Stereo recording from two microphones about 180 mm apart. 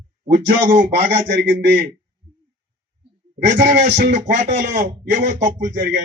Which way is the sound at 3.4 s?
50° right (ahead or behind).